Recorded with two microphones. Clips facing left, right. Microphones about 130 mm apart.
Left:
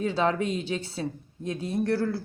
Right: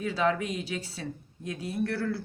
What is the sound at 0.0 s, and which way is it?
Speech, 30° left (ahead or behind).